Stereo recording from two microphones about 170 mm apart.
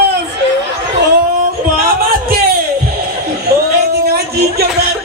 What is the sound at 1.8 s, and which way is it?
Music, 60° right (ahead or behind).